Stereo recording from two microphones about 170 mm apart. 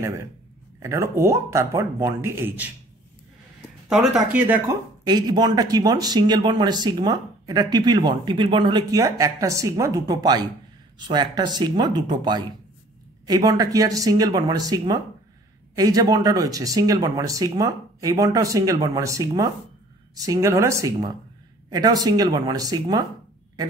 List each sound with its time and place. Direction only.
0.7 s speech: 15° right (ahead or behind)
4.1 s speech: 10° right (ahead or behind)
5.0 s speech: 25° right (ahead or behind)